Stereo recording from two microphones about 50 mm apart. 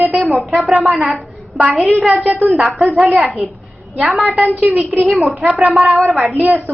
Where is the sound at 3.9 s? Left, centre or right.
Centre.